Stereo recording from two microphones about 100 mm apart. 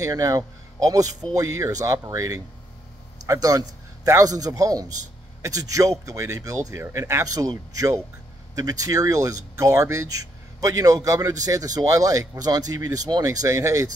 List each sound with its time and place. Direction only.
0.0 s a man's voice: 35° right (ahead or behind)